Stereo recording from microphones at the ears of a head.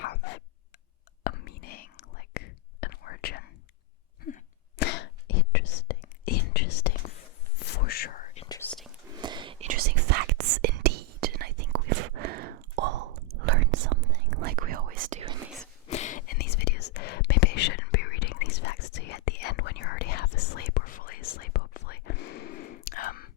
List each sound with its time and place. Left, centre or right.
0.0 s a sound: left
1.2 s whispering: left
4.8 s whispering: left
9.1 s whispering: right
15.9 s whispering: left